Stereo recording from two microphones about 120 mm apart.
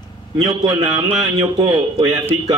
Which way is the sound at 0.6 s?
35° right (ahead or behind).